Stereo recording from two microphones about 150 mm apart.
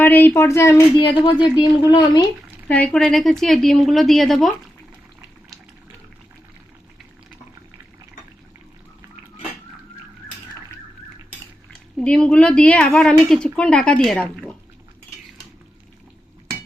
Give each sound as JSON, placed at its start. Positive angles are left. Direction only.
{"t": 0.0, "sound": "a woman's voice", "side_deg": 10}
{"t": 0.9, "sound": "speech", "side_deg": 35}
{"t": 2.6, "sound": "a woman's voice", "side_deg": 10}
{"t": 11.9, "sound": "a woman's voice", "side_deg": 5}